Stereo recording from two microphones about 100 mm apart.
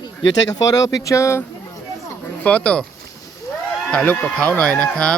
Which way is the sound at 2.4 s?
10° left (ahead or behind).